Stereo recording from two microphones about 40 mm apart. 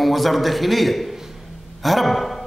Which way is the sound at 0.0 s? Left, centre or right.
Centre.